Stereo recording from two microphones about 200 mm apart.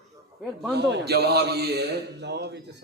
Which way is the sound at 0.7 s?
55° right (ahead or behind).